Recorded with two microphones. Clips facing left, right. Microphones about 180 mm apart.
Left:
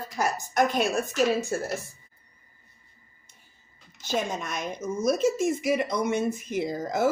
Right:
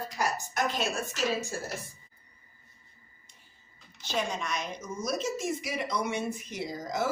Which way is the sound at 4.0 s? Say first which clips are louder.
Left 3 dB; 45° left (ahead or behind).